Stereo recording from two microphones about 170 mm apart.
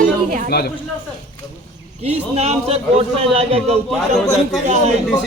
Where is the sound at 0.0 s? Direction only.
50° right (ahead or behind).